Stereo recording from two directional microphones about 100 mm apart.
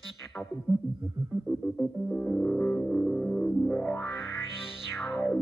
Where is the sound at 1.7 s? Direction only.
10° left (ahead or behind).